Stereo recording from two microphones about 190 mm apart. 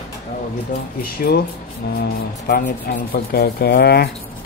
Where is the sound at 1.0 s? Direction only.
50° left (ahead or behind).